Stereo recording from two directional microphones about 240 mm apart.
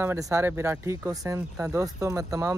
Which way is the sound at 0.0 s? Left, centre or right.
Centre.